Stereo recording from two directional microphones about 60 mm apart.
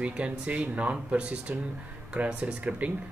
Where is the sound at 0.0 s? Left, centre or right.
Right.